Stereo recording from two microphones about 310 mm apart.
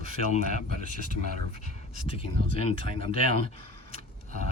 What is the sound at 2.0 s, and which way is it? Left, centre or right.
Speech, centre.